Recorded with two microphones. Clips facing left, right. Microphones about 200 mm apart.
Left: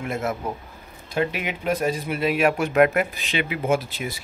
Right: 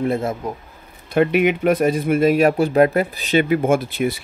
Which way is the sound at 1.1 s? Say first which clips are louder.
Right 9 dB; 60° right (ahead or behind).